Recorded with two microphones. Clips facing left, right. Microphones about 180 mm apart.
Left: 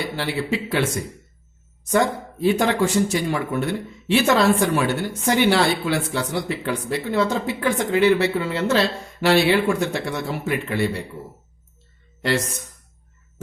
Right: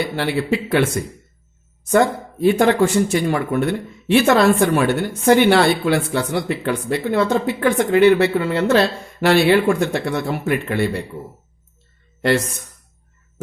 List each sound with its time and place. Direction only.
0.2 s a woman's voice: 55° right (ahead or behind)
1.9 s a woman's voice: 55° right (ahead or behind)